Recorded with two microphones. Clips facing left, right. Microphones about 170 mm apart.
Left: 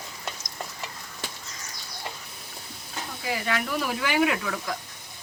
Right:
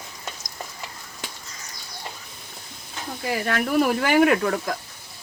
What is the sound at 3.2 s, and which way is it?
Speech, 50° right (ahead or behind).